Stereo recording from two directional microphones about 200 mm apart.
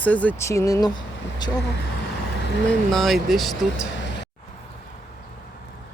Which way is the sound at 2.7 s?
Centre (ahead or behind).